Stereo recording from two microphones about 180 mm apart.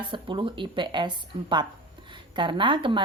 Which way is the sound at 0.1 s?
25° right (ahead or behind).